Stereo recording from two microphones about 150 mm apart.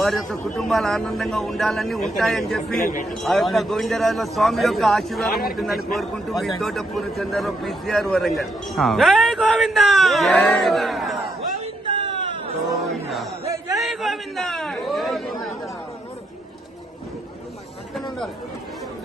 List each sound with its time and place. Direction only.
0.0 s a man's voice: centre (ahead or behind)
2.8 s speech: 65° left (ahead or behind)
3.1 s a man's voice: centre (ahead or behind)
5.3 s a man's voice: 85° left
5.5 s a man's voice: centre (ahead or behind)
11.9 s a sound: 35° right (ahead or behind)
12.8 s a sound: centre (ahead or behind)
13.7 s chatter: centre (ahead or behind)